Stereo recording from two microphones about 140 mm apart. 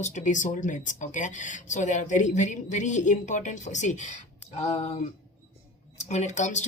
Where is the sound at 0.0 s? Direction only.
65° left (ahead or behind); by 4.9 s 45° left (ahead or behind).